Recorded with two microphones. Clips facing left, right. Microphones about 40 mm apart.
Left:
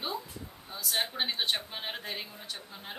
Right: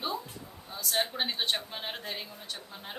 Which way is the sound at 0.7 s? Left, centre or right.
Centre.